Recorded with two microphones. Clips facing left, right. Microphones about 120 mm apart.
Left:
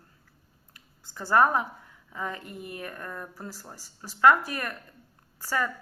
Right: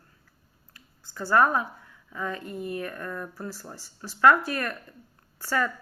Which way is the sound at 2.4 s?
25° right (ahead or behind).